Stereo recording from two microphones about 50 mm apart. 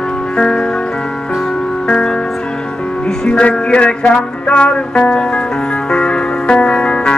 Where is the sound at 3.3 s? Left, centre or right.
Left.